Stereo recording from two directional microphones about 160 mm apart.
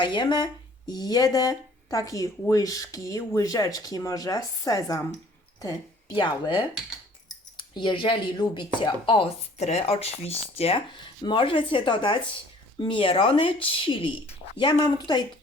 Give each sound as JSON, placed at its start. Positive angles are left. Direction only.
{"t": 0.0, "sound": "speech", "side_deg": 30}